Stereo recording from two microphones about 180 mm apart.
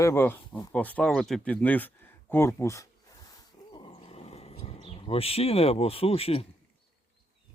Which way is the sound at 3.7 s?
30° left (ahead or behind).